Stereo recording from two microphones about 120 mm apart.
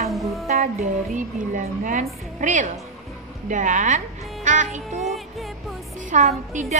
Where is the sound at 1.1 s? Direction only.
90° right.